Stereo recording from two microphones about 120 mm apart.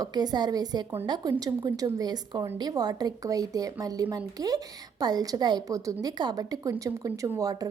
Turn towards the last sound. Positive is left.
turn(degrees=-30)  # may be behind; listen again after turning